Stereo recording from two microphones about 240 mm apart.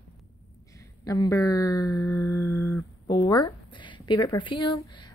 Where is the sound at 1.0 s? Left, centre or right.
Centre.